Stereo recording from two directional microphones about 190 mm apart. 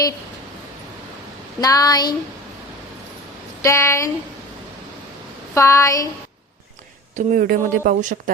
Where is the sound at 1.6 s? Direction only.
20° left (ahead or behind).